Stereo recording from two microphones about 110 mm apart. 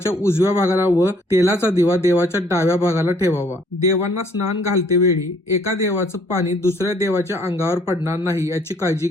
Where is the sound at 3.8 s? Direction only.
35° right (ahead or behind).